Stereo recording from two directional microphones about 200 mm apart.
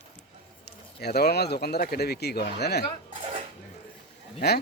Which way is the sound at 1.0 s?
55° left (ahead or behind).